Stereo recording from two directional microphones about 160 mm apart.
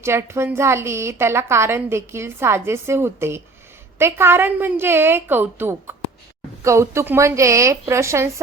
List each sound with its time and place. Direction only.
0.0 s a woman's voice: 15° right (ahead or behind)